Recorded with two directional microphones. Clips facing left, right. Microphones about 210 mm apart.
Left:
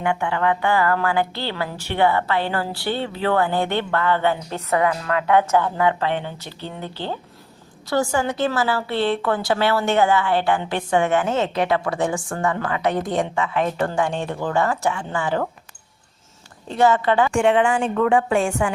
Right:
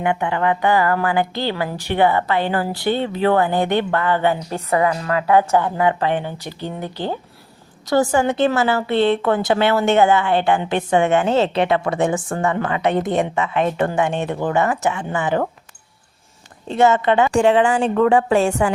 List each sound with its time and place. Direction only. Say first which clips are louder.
0.0 s a woman's voice: right 2 dB; 20° right (ahead or behind)
16.6 s a woman's voice: right 2 dB; 25° right (ahead or behind)
17.3 s speech: right 3 dB; 35° right (ahead or behind)